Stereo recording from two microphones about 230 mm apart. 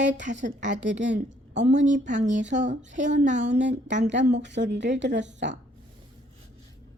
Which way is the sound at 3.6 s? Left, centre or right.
Right.